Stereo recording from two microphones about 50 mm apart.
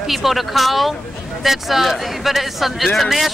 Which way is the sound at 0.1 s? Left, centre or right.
Centre.